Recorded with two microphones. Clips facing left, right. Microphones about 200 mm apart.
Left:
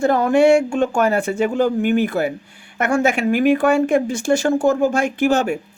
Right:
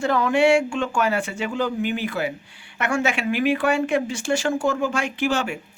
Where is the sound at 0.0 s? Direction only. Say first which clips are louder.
Left 5 dB; 45° left (ahead or behind).